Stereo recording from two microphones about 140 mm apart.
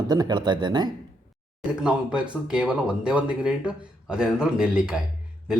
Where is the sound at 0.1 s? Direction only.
30° right (ahead or behind).